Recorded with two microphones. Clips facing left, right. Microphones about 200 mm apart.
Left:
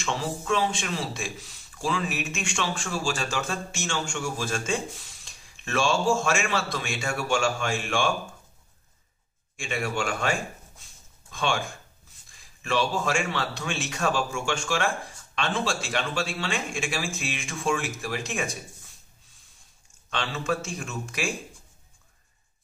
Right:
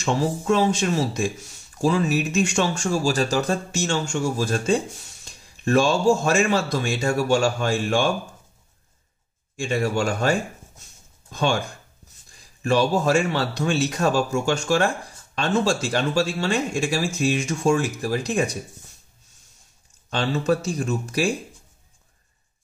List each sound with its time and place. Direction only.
0.0 s speech: 40° right (ahead or behind)
9.6 s speech: 40° right (ahead or behind)
10.8 s a sound: 40° right (ahead or behind)
12.3 s speech: 40° right (ahead or behind)
20.1 s speech: 35° right (ahead or behind)